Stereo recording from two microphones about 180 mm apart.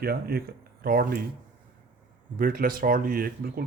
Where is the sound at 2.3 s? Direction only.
50° right (ahead or behind).